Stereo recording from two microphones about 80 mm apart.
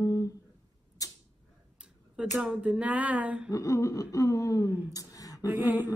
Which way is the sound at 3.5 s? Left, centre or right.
Left.